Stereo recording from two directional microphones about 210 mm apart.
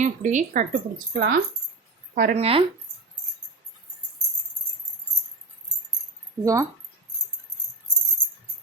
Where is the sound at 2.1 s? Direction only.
40° right (ahead or behind).